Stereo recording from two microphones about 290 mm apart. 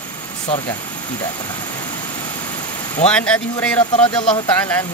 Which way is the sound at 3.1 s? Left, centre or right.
Centre.